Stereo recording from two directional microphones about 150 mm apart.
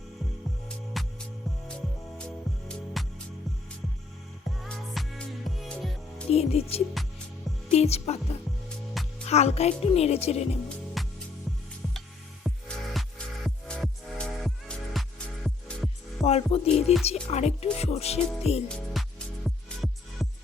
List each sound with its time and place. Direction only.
0.9 s music: centre (ahead or behind)
2.1 s music: 5° left (ahead or behind)
4.6 s music: centre (ahead or behind)
6.3 s music: 45° left (ahead or behind)
11.0 s music: centre (ahead or behind)
16.2 s music: 45° left (ahead or behind)
19.0 s music: centre (ahead or behind)